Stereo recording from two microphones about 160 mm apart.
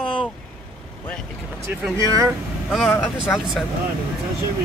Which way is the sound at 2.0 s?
20° right (ahead or behind).